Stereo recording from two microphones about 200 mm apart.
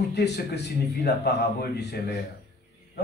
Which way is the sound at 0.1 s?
55° left (ahead or behind).